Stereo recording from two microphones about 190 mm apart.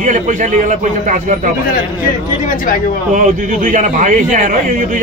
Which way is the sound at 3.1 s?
45° right (ahead or behind).